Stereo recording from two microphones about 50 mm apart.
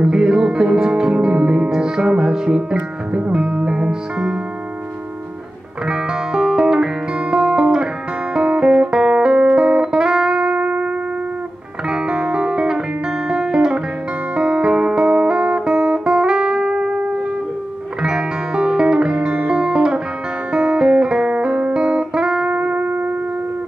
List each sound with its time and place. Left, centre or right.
0.0 s music: centre
5.9 s music: centre
11.9 s music: centre
18.0 s music: centre
22.5 s music: right